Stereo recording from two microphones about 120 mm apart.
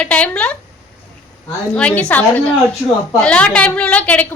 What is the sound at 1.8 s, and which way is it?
A woman's voice, 10° left (ahead or behind).